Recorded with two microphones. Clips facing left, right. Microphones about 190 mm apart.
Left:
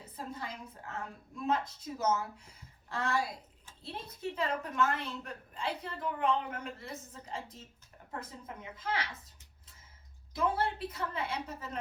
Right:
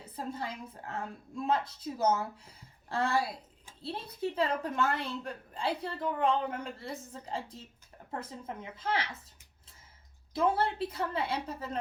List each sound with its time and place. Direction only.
0.0 s a woman's voice: 30° right (ahead or behind)
10.3 s a woman's voice: 30° right (ahead or behind)